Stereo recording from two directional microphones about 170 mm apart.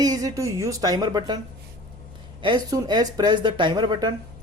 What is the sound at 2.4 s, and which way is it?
Speech, 25° right (ahead or behind).